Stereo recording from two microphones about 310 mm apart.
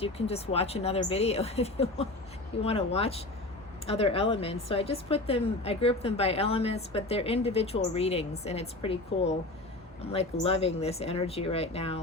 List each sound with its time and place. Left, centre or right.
0.0 s a woman's voice: centre
10.1 s a woman's voice: centre